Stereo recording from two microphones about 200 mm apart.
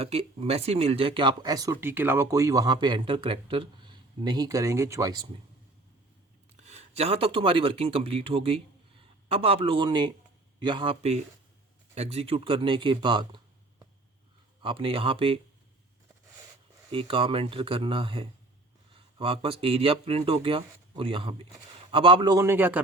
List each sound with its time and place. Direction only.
0.0 s speech: 30° right (ahead or behind)
6.6 s speech: 35° right (ahead or behind)
14.6 s speech: 25° right (ahead or behind)
16.9 s speech: 25° right (ahead or behind); by 22.8 s 10° right (ahead or behind)